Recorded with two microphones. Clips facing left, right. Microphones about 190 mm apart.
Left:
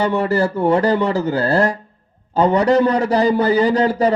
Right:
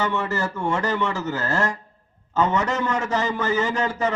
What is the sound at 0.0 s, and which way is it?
A man's voice, 35° left (ahead or behind).